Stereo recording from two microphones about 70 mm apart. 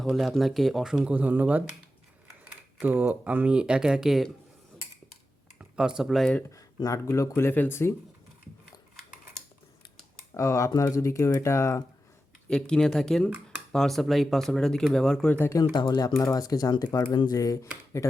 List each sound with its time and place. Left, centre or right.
0.0 s speech: centre
1.1 s speech: right
2.8 s speech: right; by 4.3 s centre
5.5 s speech: centre
6.9 s speech: left
7.3 s speech: left
10.3 s speech: left
12.5 s speech: centre
15.4 s speech: left
15.7 s speech: left